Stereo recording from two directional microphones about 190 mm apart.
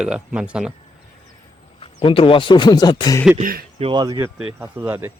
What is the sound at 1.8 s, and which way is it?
Speech, 25° left (ahead or behind).